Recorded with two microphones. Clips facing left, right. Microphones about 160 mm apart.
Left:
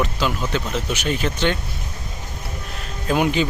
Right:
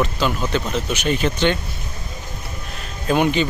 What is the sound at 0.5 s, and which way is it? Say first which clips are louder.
Speech: right 2 dB; 5° left (ahead or behind).